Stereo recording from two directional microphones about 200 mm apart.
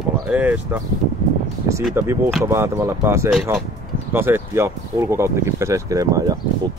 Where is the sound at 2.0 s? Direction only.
10° right (ahead or behind).